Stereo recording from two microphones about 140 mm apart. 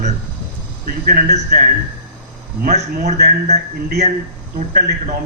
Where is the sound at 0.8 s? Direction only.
90° right.